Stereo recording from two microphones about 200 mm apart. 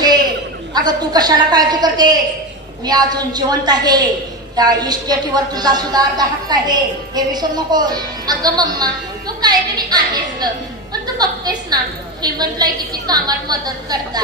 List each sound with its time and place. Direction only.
0.7 s a woman's voice: 20° right (ahead or behind)